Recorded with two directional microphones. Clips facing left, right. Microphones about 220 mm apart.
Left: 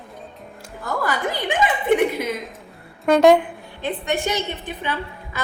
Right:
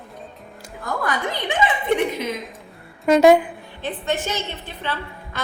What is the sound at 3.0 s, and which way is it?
Speech, centre (ahead or behind).